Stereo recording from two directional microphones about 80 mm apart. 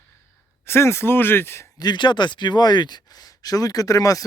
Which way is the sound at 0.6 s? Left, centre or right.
Left.